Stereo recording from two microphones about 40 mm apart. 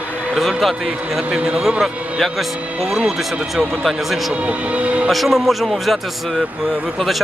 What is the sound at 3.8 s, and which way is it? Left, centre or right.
Speech, centre.